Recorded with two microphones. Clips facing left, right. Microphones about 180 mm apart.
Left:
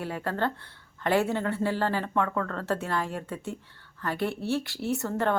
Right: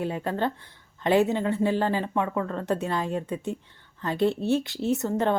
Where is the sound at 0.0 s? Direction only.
20° right (ahead or behind).